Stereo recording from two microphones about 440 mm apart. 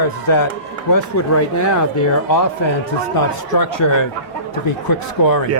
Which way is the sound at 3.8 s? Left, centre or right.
Left.